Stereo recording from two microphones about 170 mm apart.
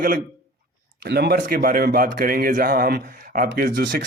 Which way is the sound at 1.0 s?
75° right (ahead or behind).